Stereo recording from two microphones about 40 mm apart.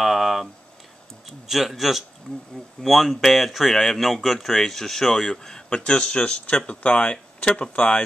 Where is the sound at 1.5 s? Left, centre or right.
Centre.